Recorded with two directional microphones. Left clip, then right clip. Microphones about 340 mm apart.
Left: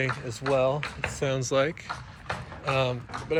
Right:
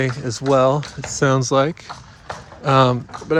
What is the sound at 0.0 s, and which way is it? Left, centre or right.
Speech, right.